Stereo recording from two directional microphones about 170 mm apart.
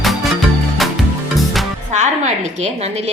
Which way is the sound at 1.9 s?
40° right (ahead or behind).